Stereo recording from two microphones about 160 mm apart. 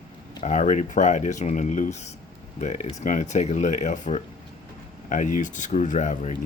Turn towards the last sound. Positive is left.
turn(degrees=50)  # may be behind; listen again after turning